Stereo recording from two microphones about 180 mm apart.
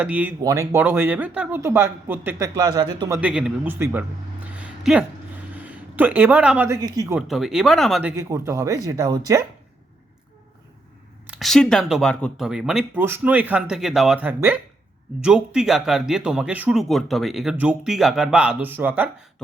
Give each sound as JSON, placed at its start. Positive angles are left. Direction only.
{"t": 0.0, "sound": "speech", "side_deg": -10}
{"t": 3.2, "sound": "speech", "side_deg": -5}
{"t": 4.5, "sound": "a sound", "side_deg": -5}
{"t": 5.5, "sound": "speech", "side_deg": -10}
{"t": 7.2, "sound": "speech", "side_deg": 0}
{"t": 8.1, "sound": "speech", "side_deg": -15}
{"t": 11.3, "sound": "speech", "side_deg": 0}